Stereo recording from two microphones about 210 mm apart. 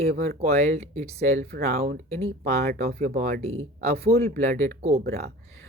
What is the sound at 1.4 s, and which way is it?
Speech, 45° right (ahead or behind).